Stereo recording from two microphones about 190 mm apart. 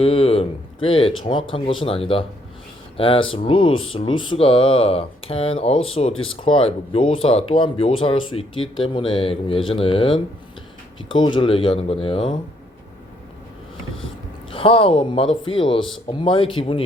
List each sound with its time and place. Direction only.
0.0 s speech: 30° left (ahead or behind)
14.5 s speech: 30° left (ahead or behind)